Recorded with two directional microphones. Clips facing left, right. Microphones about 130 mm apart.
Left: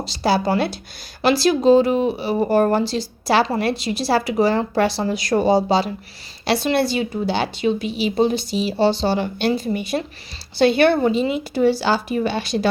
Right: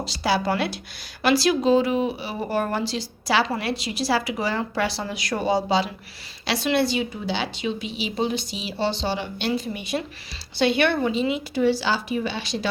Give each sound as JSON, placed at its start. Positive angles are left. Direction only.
{"t": 0.2, "sound": "a woman's voice", "side_deg": 35}